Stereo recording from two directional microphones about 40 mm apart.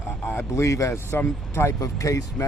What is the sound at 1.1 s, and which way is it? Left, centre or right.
Speech, left.